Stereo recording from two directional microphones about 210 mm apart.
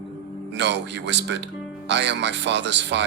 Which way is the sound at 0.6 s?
55° right (ahead or behind).